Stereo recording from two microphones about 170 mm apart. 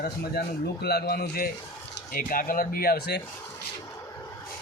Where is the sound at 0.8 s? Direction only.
70° left (ahead or behind).